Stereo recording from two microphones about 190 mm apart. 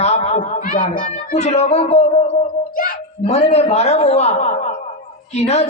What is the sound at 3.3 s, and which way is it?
A man's voice, 35° left (ahead or behind).